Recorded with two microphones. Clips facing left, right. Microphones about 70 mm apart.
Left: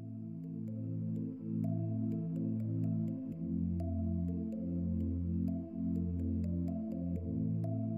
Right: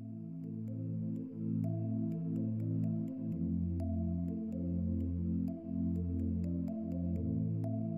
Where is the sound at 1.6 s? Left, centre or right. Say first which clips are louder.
Even; centre.